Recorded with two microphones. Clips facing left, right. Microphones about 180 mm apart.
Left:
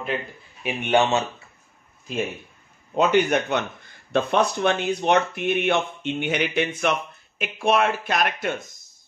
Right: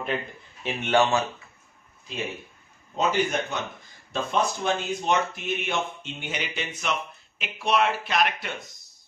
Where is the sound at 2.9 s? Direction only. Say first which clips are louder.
Left 5 dB; 65° left (ahead or behind).